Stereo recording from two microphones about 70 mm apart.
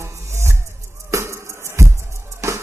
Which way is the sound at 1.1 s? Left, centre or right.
Right.